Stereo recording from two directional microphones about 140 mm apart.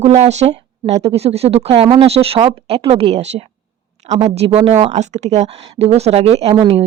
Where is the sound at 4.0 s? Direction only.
50° right (ahead or behind).